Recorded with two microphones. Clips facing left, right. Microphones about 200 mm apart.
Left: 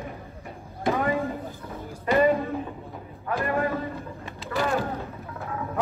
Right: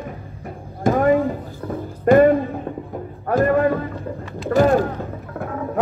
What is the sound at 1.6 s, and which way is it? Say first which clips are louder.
Music: right 13 dB; 50° right (ahead or behind).